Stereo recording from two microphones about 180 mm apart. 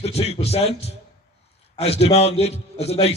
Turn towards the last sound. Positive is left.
turn(degrees=35)  # may be behind; listen again after turning